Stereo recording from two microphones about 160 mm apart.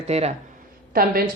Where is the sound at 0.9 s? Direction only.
70° right (ahead or behind).